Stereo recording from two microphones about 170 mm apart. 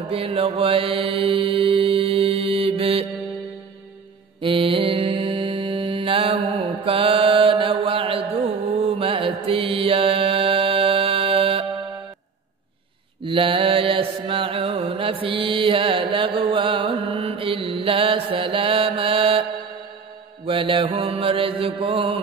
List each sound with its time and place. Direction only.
0.1 s mantra: 35° right (ahead or behind)
4.4 s mantra: 30° right (ahead or behind)
13.2 s mantra: 30° right (ahead or behind)
20.4 s mantra: 30° right (ahead or behind)